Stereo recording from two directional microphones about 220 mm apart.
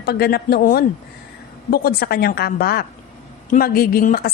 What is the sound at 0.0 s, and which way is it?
A woman's voice, 45° left (ahead or behind).